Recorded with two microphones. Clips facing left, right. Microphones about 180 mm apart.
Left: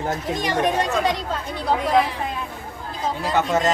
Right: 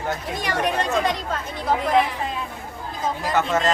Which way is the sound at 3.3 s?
15° left (ahead or behind).